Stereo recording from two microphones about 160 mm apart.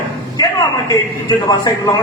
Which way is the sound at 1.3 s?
25° left (ahead or behind).